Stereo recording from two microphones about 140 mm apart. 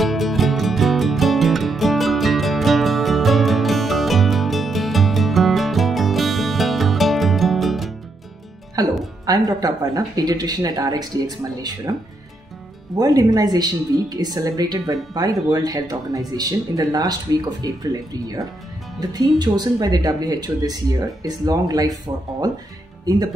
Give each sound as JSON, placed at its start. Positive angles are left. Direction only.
{"t": 0.0, "sound": "music", "side_deg": 0}
{"t": 8.8, "sound": "music", "side_deg": -25}
{"t": 9.2, "sound": "speech", "side_deg": -25}
{"t": 12.9, "sound": "speech", "side_deg": -25}